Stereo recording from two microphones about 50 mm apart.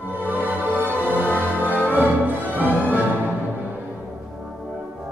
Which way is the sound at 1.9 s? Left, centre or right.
Right.